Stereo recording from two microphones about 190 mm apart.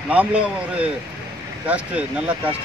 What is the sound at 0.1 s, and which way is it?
Speech, 5° right (ahead or behind).